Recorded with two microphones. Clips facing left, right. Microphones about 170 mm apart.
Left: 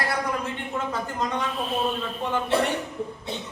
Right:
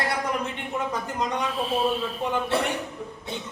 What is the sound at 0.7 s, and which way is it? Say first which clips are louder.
Speech: right 1 dB; 15° right (ahead or behind).